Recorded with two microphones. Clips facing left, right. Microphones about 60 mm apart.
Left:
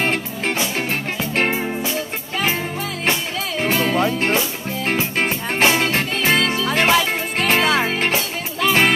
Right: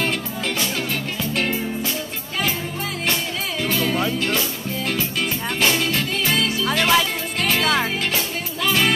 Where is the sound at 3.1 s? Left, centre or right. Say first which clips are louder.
Left 4 dB; left.